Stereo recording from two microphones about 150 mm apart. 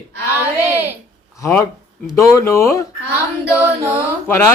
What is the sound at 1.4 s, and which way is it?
Speech, 15° left (ahead or behind).